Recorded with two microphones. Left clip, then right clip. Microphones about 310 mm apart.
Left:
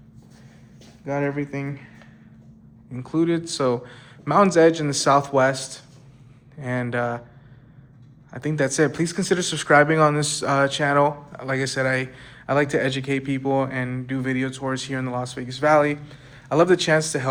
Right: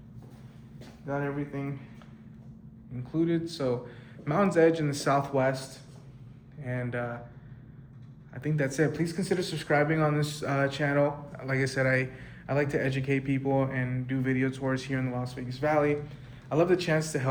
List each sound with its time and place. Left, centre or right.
1.0 s speech: left
2.9 s speech: centre
6.6 s speech: centre
8.3 s speech: centre